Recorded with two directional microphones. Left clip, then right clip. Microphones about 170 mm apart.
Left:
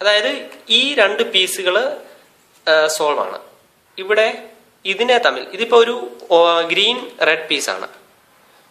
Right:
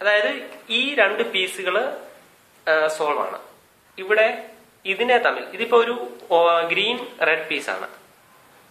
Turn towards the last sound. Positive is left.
turn(degrees=60)  # may be behind; listen again after turning